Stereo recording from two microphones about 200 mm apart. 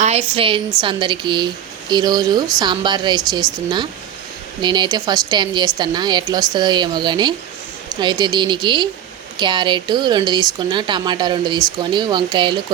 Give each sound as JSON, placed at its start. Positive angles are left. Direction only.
{"t": 0.0, "sound": "a woman's voice", "side_deg": -30}
{"t": 4.6, "sound": "speech", "side_deg": -20}